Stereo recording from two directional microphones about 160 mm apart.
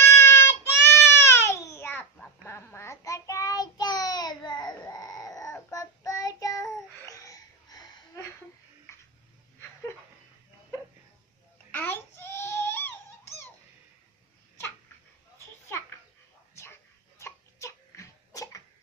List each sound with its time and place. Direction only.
0.0 s baby cry: 15° left (ahead or behind)
11.7 s baby cry: 10° left (ahead or behind)
17.2 s a sound: 15° left (ahead or behind)